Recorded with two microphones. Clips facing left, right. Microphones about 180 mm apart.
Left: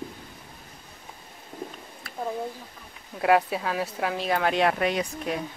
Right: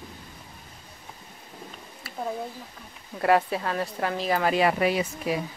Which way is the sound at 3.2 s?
Centre (ahead or behind).